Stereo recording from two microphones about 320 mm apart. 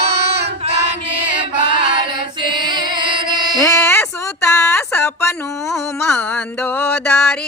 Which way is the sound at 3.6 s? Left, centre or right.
Centre.